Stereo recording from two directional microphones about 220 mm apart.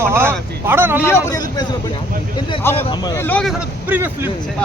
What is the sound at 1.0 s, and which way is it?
Speech, 10° left (ahead or behind).